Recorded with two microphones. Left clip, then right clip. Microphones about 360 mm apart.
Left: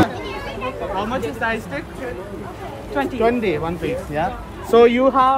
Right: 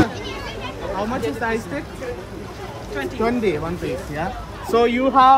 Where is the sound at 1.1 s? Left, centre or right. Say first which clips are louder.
Left 1 dB; left.